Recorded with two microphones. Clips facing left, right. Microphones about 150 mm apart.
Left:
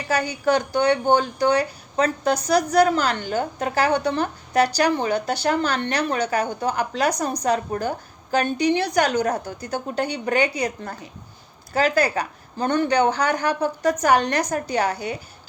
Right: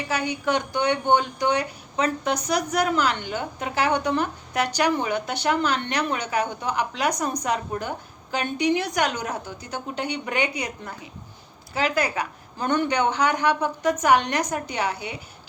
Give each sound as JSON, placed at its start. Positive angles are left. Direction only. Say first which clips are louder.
{"t": 0.1, "sound": "speech", "louder": "left 5 dB", "side_deg": 40}